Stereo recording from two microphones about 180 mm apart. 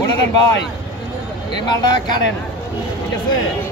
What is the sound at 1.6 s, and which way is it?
Speech, 25° left (ahead or behind).